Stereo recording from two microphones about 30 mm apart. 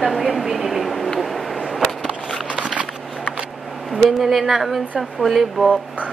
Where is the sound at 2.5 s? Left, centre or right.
Right.